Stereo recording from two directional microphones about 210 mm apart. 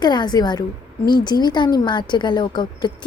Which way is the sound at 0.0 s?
20° left (ahead or behind).